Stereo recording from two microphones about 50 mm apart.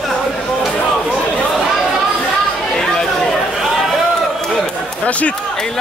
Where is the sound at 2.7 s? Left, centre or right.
Centre.